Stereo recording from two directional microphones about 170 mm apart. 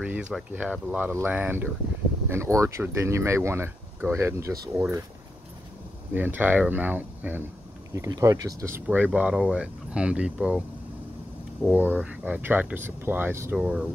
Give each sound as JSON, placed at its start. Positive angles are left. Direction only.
{"t": 0.0, "sound": "speech", "side_deg": -5}
{"t": 6.1, "sound": "speech", "side_deg": -10}
{"t": 11.6, "sound": "speech", "side_deg": -10}